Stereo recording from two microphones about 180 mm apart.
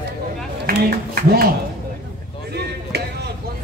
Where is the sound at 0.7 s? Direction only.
55° right (ahead or behind).